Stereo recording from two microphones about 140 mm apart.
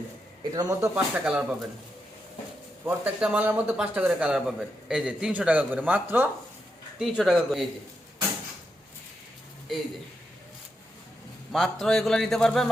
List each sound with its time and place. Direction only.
0.5 s speech: 25° right (ahead or behind)
0.9 s speech: 10° right (ahead or behind)
2.8 s speech: 10° right (ahead or behind)
7.0 s a man's voice: centre (ahead or behind)
11.5 s a man's voice: centre (ahead or behind)